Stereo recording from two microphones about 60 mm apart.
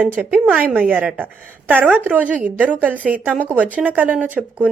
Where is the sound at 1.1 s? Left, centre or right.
Right.